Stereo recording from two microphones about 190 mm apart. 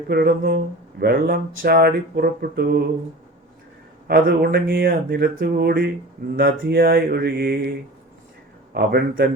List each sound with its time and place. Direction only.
0.1 s speech: 55° right (ahead or behind)
4.1 s speech: 50° right (ahead or behind)
8.7 s speech: 55° right (ahead or behind)